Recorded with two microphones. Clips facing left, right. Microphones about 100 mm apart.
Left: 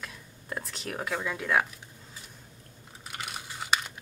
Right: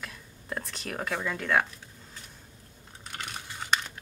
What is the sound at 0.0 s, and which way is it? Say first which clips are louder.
Whispering: right 1 dB; centre (ahead or behind).